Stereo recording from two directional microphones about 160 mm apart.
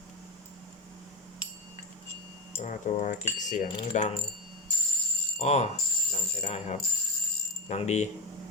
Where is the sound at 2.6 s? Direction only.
50° left (ahead or behind).